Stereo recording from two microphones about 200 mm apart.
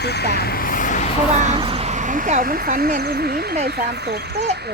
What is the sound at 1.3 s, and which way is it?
Speech, 35° right (ahead or behind).